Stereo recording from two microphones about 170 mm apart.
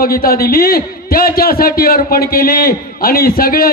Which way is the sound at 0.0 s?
60° left (ahead or behind).